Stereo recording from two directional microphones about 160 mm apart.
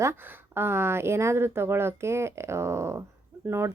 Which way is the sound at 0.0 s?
15° right (ahead or behind).